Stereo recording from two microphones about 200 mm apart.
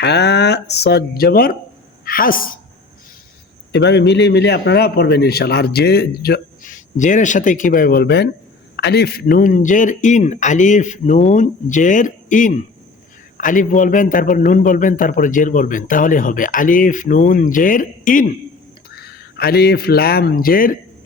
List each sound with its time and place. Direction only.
0.0 s speech: 55° left (ahead or behind)
3.7 s a man's voice: 55° left (ahead or behind)